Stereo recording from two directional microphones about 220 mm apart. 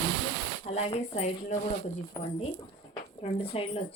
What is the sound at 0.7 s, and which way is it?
Speech, 30° left (ahead or behind).